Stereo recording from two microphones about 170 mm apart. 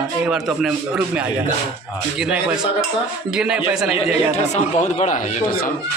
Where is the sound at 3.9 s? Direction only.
40° left (ahead or behind).